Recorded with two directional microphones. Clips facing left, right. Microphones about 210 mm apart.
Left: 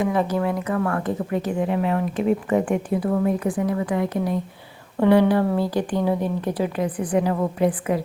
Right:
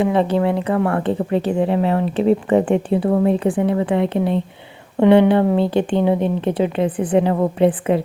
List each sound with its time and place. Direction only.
0.0 s speech: 25° right (ahead or behind)